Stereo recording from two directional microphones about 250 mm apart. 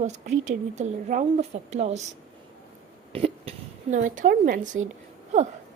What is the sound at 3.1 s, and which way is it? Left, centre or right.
A woman's voice, right.